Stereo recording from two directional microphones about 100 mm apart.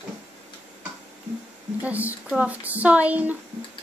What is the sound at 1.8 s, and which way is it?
Speech, 15° right (ahead or behind).